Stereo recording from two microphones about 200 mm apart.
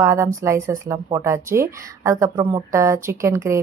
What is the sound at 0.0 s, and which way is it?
A woman's voice, 15° right (ahead or behind).